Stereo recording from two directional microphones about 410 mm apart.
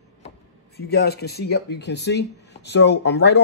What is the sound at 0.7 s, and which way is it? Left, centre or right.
Speech, left.